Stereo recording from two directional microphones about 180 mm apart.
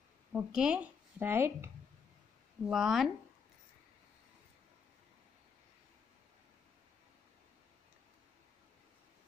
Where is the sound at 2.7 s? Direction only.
Centre (ahead or behind).